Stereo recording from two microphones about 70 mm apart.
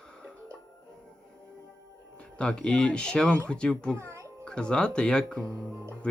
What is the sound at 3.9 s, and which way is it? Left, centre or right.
Music, right.